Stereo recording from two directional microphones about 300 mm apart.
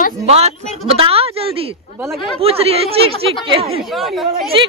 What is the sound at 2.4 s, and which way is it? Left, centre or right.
Speech, centre.